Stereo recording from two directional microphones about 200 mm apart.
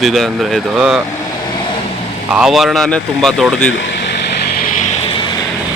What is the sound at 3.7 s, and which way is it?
Vehicle, 60° left (ahead or behind).